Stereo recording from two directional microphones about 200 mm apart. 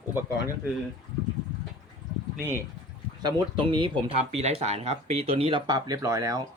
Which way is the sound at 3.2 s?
25° right (ahead or behind).